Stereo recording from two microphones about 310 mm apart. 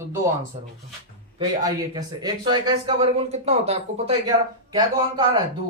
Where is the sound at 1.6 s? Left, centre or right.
Centre.